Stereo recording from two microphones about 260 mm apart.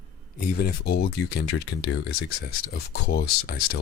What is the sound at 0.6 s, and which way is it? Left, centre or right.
Speech, left.